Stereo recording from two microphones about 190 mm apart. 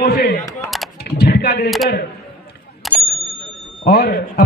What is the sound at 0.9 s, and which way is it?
Typing, 55° left (ahead or behind).